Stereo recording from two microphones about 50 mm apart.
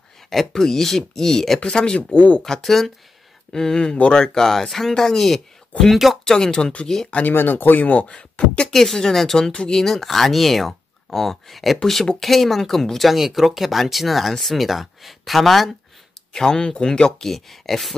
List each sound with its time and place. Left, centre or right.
0.3 s speech: centre
2.0 s speech: left
2.4 s speech: centre
7.2 s speech: left
8.6 s speech: centre
9.5 s speech: centre
9.8 s speech: centre
16.3 s speech: centre
17.3 s speech: centre